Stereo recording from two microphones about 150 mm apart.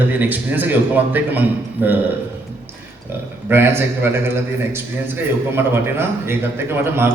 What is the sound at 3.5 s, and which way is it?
Speech, 15° right (ahead or behind).